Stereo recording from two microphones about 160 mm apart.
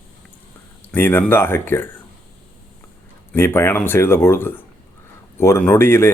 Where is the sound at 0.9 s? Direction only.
15° left (ahead or behind).